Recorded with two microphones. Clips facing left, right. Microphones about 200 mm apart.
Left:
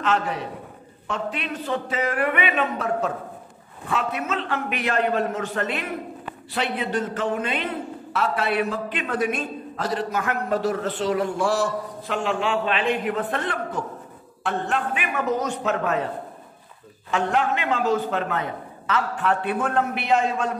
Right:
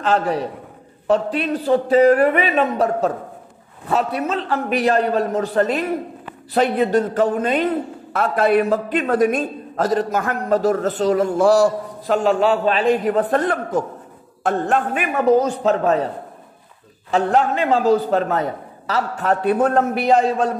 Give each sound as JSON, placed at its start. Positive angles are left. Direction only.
{"t": 0.0, "sound": "a man's voice", "side_deg": -35}
{"t": 17.1, "sound": "a man's voice", "side_deg": -35}